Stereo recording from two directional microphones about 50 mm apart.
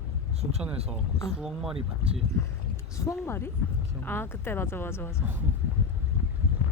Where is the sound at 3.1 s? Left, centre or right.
Left.